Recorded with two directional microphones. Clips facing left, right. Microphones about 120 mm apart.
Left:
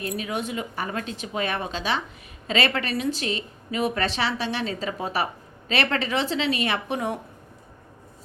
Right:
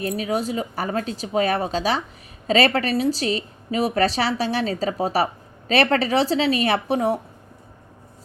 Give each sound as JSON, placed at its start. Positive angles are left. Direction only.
{"t": 0.0, "sound": "a woman's voice", "side_deg": -35}